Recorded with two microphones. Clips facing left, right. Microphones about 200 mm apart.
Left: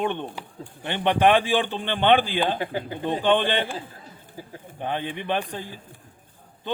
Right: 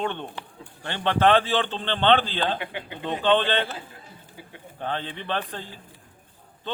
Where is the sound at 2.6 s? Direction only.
40° left (ahead or behind).